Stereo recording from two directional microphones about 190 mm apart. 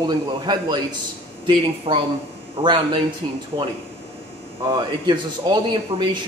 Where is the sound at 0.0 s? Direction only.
20° right (ahead or behind).